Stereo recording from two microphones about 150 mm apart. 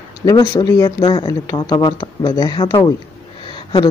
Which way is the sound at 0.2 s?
25° left (ahead or behind).